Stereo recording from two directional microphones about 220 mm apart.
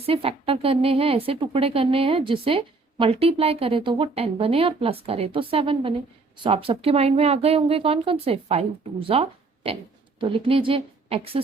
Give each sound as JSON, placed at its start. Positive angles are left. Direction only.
{"t": 0.0, "sound": "a woman's voice", "side_deg": -25}